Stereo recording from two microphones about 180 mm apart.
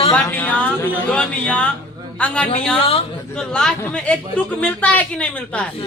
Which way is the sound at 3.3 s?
5° left (ahead or behind).